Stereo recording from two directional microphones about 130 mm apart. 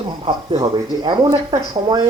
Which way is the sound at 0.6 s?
30° right (ahead or behind).